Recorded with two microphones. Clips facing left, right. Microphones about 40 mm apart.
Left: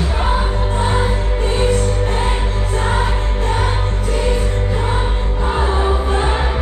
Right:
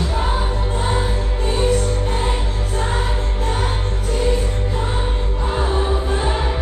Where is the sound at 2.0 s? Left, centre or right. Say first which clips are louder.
Left 3 dB; left.